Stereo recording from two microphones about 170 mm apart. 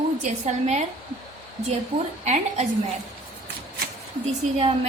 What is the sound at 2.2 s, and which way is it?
Speech, 40° right (ahead or behind).